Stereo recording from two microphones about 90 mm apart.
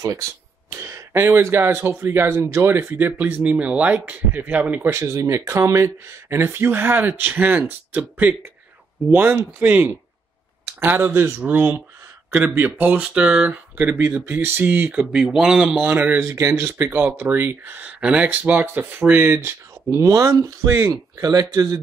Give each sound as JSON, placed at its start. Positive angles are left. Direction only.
{"t": 0.7, "sound": "speech", "side_deg": -30}
{"t": 15.1, "sound": "speech", "side_deg": -5}
{"t": 15.8, "sound": "speech", "side_deg": -20}
{"t": 19.3, "sound": "speech", "side_deg": -35}
{"t": 21.2, "sound": "speech", "side_deg": -45}